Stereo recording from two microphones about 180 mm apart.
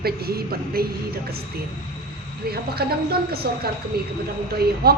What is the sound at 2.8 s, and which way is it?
Speech, 60° right (ahead or behind).